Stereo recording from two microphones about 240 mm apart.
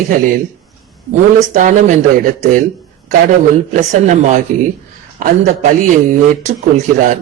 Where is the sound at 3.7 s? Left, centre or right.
Right.